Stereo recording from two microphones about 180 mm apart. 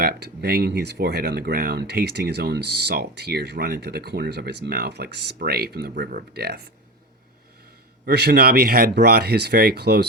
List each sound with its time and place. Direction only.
0.0 s speech: 60° right (ahead or behind)
8.0 s speech: 65° right (ahead or behind)